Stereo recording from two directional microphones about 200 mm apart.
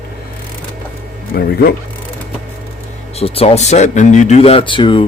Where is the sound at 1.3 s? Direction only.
50° left (ahead or behind).